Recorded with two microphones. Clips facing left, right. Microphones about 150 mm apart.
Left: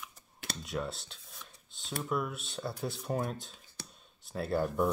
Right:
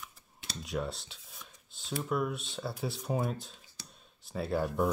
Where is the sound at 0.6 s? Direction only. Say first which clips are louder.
Right 2 dB; centre (ahead or behind).